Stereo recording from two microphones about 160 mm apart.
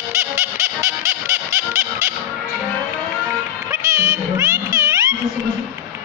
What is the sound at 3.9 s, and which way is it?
Music, 20° right (ahead or behind).